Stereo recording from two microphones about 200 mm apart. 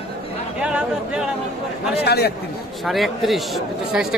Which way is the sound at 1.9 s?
55° left (ahead or behind).